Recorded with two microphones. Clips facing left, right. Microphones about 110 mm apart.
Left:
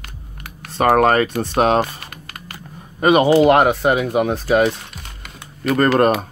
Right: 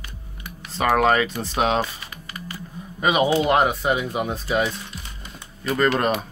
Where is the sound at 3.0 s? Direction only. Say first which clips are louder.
Left 7 dB; 60° left (ahead or behind).